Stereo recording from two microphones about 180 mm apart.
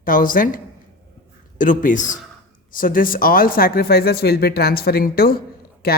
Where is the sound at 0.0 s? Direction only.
50° left (ahead or behind).